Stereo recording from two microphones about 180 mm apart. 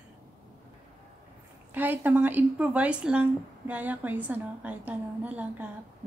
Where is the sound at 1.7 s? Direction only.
10° right (ahead or behind).